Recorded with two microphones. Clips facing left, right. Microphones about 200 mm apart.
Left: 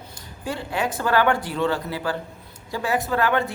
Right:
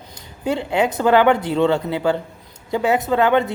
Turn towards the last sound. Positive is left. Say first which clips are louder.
# right 6 dB
turn(degrees=-20)  # may be behind; listen again after turning